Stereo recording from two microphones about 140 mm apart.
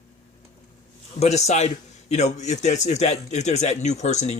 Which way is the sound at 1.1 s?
50° left (ahead or behind).